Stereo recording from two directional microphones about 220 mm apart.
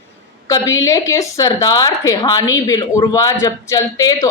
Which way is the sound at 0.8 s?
15° left (ahead or behind).